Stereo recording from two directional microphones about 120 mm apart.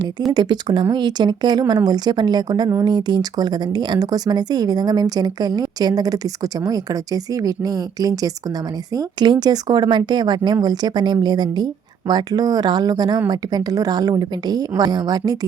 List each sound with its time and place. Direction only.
0.3 s speech: 35° right (ahead or behind)